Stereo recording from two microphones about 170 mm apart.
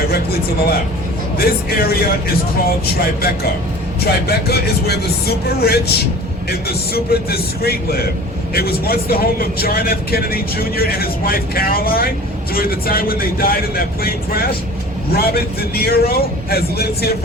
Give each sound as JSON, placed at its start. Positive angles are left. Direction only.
{"t": 0.1, "sound": "speech", "side_deg": 65}
{"t": 4.0, "sound": "speech", "side_deg": 70}